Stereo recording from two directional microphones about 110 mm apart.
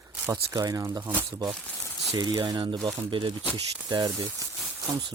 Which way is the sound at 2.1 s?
40° right (ahead or behind).